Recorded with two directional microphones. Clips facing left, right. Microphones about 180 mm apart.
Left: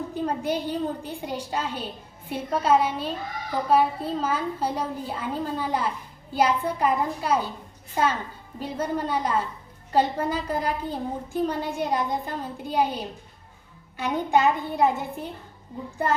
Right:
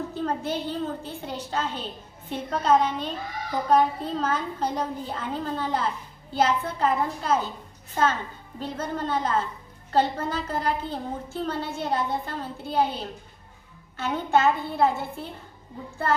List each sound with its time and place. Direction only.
0.1 s a woman's voice: 15° left (ahead or behind)